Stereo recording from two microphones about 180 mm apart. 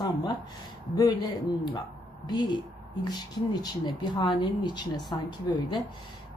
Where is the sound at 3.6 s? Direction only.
25° left (ahead or behind).